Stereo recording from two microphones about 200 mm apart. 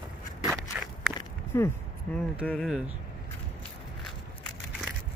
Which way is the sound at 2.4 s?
Centre (ahead or behind).